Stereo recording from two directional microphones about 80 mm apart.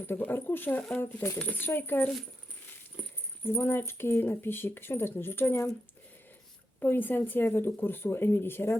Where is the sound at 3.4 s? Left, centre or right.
Left.